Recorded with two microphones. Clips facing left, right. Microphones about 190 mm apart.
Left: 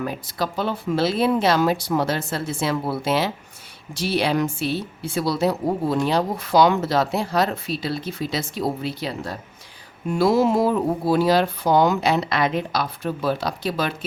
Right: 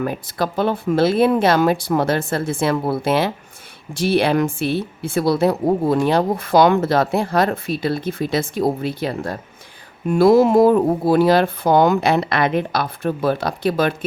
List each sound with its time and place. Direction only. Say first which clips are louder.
0.0 s a woman's voice: right 4 dB; 55° right (ahead or behind)